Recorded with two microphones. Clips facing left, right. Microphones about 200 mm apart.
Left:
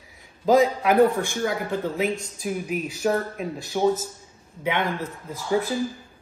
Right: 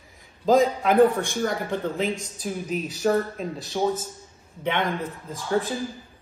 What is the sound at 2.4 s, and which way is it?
A man's voice, 10° left (ahead or behind).